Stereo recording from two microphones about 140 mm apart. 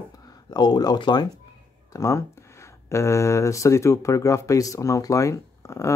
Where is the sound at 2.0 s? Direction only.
20° left (ahead or behind).